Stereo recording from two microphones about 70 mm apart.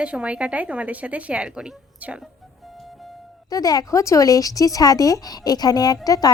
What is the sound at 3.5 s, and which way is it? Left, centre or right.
Speech, left.